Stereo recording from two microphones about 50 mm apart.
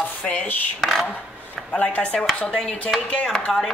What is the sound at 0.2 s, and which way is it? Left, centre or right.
Speech, left.